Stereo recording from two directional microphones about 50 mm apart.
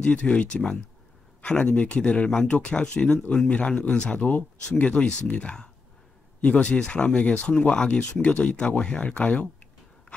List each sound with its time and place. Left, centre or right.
0.0 s speech: left